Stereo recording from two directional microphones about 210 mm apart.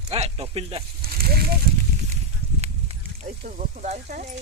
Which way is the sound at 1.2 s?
45° right (ahead or behind).